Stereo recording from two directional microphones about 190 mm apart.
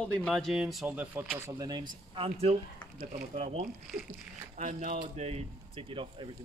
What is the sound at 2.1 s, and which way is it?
Speech, 30° right (ahead or behind).